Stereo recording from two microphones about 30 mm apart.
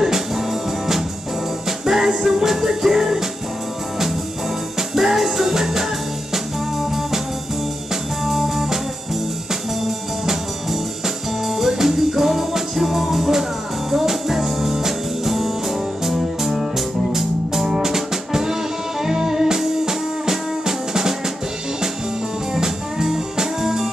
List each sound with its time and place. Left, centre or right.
0.0 s music: centre
4.7 s music: centre
9.8 s music: centre
17.6 s music: centre
22.5 s music: centre